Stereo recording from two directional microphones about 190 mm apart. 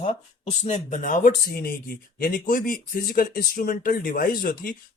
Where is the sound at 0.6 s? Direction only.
35° left (ahead or behind).